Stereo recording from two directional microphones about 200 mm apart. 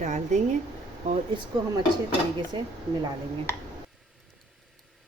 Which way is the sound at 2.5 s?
25° right (ahead or behind).